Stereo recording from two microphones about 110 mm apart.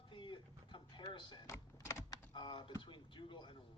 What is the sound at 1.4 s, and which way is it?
Typing, 30° left (ahead or behind).